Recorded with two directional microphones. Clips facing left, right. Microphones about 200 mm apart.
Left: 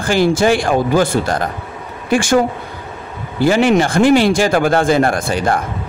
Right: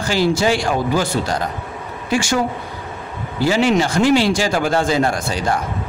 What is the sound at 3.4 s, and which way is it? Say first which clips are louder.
A man's voice: left 4 dB; 55° left (ahead or behind).